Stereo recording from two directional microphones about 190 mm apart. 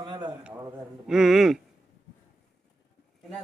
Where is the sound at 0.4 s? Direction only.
5° right (ahead or behind).